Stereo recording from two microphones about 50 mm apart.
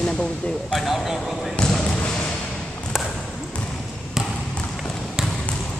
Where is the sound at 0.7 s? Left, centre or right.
Centre.